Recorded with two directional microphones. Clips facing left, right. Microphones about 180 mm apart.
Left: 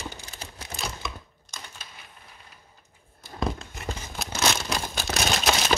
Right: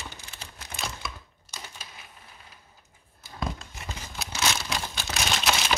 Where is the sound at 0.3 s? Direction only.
40° left (ahead or behind).